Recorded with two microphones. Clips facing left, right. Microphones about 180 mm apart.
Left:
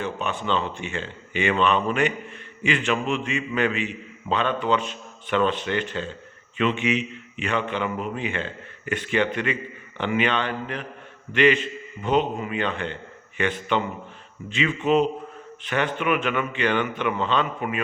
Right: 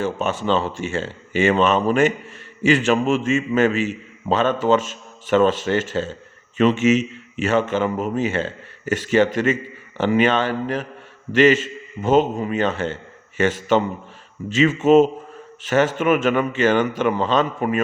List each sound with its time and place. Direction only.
0.0 s a man's voice: 45° right (ahead or behind)
15.6 s speech: 40° right (ahead or behind)